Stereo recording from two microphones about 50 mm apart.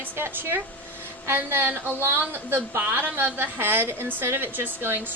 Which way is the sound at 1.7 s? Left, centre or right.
Right.